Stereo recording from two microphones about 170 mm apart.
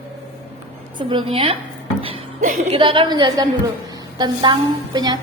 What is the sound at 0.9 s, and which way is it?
Speech, 30° right (ahead or behind).